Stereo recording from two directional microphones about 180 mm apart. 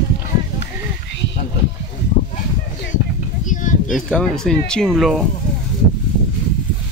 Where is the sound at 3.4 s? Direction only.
45° left (ahead or behind).